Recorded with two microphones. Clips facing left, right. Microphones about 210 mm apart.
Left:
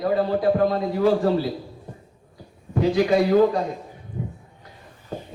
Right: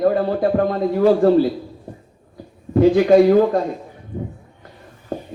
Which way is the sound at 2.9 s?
50° right (ahead or behind).